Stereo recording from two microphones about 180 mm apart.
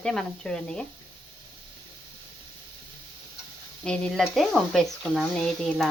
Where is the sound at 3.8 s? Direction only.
5° left (ahead or behind).